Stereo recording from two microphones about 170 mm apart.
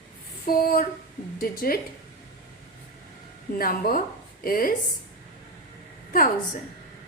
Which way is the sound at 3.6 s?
55° left (ahead or behind).